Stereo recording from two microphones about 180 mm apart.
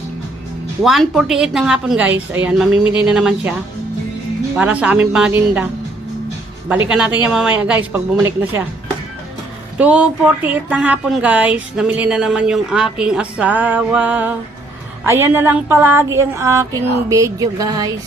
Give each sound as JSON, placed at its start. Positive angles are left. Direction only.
{"t": 0.8, "sound": "a woman's voice", "side_deg": 0}
{"t": 4.5, "sound": "speech", "side_deg": -5}
{"t": 6.8, "sound": "speech", "side_deg": -5}
{"t": 9.7, "sound": "speech", "side_deg": -5}